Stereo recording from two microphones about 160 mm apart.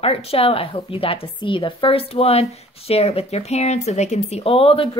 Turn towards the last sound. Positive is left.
turn(degrees=35)  # may be behind; listen again after turning